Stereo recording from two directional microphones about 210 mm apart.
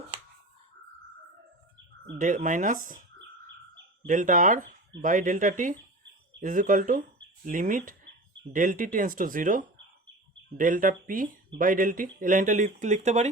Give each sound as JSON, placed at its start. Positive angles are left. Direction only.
{"t": 2.1, "sound": "speech", "side_deg": -35}
{"t": 4.0, "sound": "speech", "side_deg": -40}